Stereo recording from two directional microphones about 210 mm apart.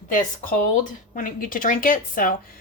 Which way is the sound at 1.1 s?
40° left (ahead or behind).